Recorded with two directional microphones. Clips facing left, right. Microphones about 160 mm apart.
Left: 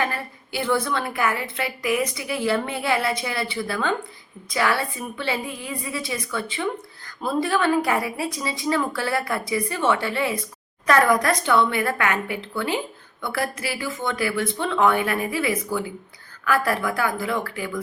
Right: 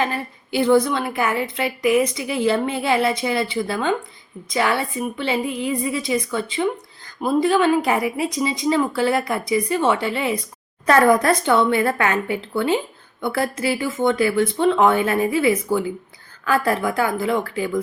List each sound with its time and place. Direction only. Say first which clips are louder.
0.0 s a woman's voice: right 3 dB; 20° right (ahead or behind)